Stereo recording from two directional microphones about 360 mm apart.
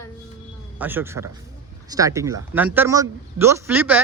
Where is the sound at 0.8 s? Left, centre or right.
Centre.